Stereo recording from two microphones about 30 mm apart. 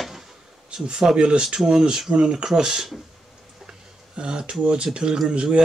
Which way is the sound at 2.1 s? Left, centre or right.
Right.